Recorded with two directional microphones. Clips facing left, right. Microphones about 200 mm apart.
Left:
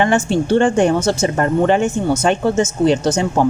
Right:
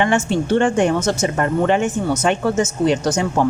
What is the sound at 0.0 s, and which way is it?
Speech, 35° left (ahead or behind).